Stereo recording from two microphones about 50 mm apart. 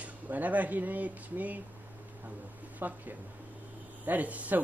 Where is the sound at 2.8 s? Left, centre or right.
Right.